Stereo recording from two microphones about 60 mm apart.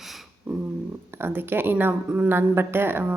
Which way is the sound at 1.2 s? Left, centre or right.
Right.